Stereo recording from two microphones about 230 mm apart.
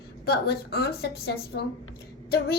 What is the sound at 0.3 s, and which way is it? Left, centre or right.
A child's voice, left.